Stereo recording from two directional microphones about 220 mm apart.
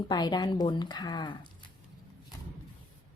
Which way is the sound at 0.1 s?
20° left (ahead or behind).